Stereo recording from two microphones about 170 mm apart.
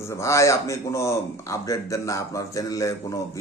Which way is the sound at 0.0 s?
15° left (ahead or behind).